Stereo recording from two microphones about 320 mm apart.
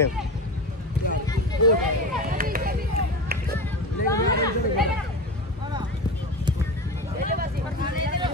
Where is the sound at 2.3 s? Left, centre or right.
Right.